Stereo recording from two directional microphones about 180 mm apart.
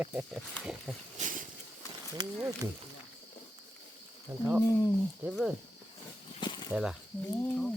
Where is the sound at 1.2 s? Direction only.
50° right (ahead or behind).